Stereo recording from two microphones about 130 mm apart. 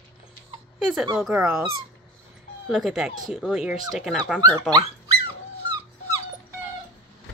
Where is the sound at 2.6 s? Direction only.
Centre (ahead or behind).